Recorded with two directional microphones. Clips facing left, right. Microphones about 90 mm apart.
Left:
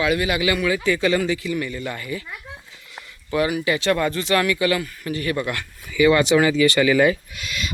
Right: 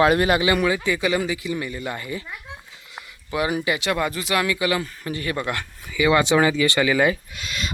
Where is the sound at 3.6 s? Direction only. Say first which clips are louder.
Left 3 dB; 15° right (ahead or behind); by 7.6 s 30° right (ahead or behind).